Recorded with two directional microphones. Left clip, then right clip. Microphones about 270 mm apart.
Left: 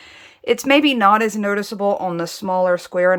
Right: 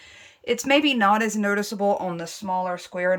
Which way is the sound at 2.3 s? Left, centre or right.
Left.